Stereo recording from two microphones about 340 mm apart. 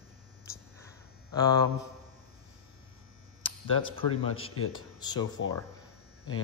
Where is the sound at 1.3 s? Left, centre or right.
Centre.